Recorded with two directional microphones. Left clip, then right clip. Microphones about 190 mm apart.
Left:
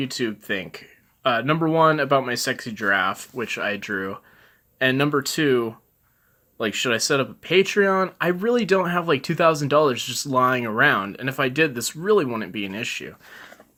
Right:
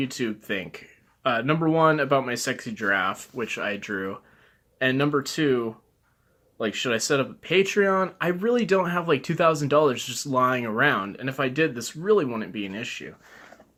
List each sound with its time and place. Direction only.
0.0 s speech: 25° left (ahead or behind)